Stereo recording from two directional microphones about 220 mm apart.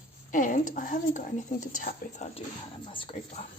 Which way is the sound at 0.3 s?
35° left (ahead or behind).